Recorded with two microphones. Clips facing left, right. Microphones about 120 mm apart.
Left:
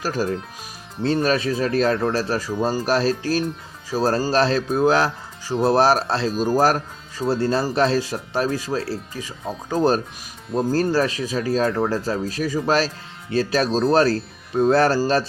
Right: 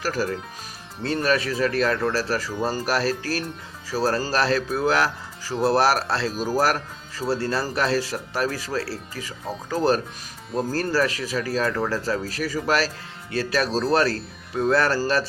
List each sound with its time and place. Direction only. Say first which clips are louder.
0.0 s speech: left 2 dB; 20° left (ahead or behind)
2.2 s speech: left 3 dB; 20° left (ahead or behind)